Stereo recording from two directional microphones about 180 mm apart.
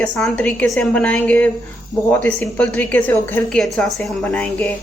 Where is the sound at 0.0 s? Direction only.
5° left (ahead or behind).